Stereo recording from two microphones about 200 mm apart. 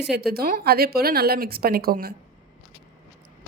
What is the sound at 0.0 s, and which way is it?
A woman's voice, 55° right (ahead or behind).